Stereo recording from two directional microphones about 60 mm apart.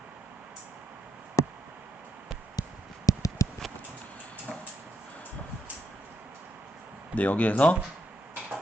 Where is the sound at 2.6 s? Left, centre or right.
Left.